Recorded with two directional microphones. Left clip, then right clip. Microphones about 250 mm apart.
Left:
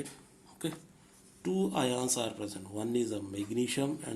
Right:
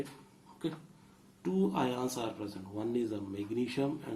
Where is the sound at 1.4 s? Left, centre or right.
Left.